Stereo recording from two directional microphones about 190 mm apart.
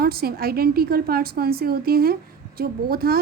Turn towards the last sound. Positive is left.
turn(degrees=-50)  # may be behind; listen again after turning